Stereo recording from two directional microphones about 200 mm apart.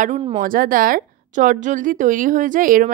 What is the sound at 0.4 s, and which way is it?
A woman's voice, 45° right (ahead or behind).